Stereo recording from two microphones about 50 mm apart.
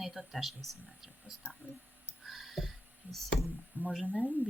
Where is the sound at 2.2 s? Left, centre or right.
Centre.